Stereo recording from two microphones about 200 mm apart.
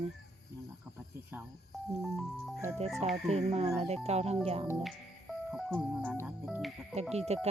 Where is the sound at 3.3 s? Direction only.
30° right (ahead or behind).